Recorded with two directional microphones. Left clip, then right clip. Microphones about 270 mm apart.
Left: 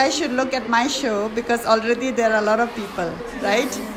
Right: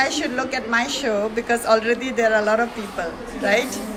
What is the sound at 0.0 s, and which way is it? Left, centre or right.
A woman's voice, centre.